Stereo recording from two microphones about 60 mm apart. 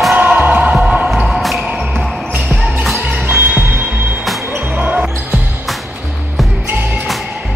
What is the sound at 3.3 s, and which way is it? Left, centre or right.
Music, right.